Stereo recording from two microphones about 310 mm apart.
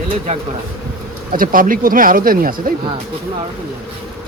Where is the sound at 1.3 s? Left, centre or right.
Right.